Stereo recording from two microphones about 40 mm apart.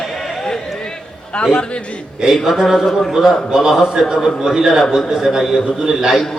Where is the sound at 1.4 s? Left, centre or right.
Left.